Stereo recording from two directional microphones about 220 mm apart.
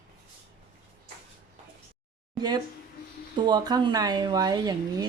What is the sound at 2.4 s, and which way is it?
Speech, 20° right (ahead or behind).